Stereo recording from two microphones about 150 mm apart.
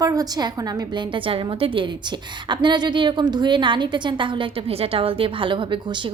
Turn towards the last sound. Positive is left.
turn(degrees=-30)  # may be behind; listen again after turning